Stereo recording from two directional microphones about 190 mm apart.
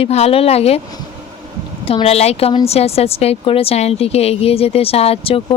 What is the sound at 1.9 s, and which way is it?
Speech, 30° left (ahead or behind).